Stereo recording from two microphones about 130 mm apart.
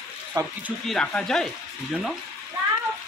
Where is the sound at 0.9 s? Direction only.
5° left (ahead or behind).